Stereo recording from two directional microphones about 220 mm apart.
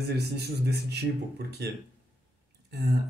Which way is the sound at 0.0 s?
45° right (ahead or behind).